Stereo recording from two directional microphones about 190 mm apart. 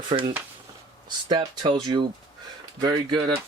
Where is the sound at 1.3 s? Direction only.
25° right (ahead or behind).